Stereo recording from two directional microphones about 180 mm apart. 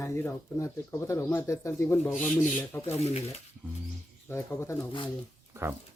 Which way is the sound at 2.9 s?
35° left (ahead or behind).